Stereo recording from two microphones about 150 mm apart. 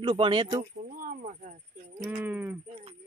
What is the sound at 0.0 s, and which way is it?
Speech, 35° right (ahead or behind).